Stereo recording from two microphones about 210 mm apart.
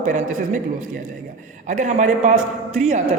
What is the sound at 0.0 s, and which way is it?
Speech, 35° right (ahead or behind).